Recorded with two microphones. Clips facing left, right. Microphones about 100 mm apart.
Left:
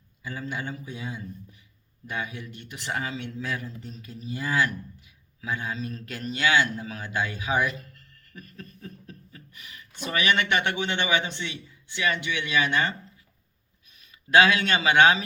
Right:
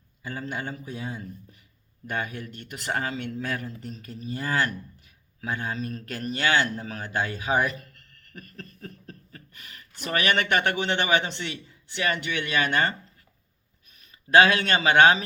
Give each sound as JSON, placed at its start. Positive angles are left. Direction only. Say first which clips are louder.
{"t": 0.2, "sound": "a man's voice", "louder": "right 1 dB", "side_deg": -45}
{"t": 14.0, "sound": "speech", "louder": "right 1 dB", "side_deg": -40}